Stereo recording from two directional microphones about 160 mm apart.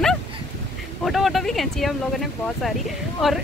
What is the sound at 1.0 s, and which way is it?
Speech, centre (ahead or behind).